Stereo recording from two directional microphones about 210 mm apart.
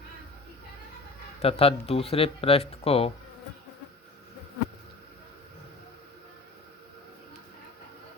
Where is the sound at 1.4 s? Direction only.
25° left (ahead or behind).